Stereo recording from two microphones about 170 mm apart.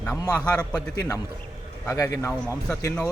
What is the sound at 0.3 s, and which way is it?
Speech, 5° left (ahead or behind).